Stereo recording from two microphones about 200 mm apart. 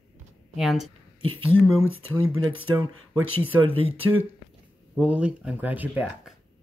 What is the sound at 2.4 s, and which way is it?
Speech, 25° right (ahead or behind).